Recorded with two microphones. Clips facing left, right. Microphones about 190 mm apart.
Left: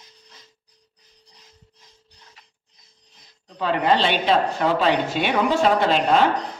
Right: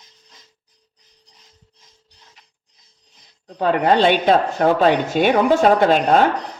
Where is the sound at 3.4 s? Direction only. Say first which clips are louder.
Right 4 dB; 50° right (ahead or behind).